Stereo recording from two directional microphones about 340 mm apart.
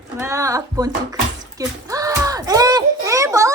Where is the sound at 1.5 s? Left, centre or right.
Centre.